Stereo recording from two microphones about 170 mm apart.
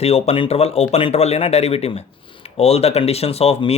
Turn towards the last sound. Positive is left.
turn(degrees=35)  # may be behind; listen again after turning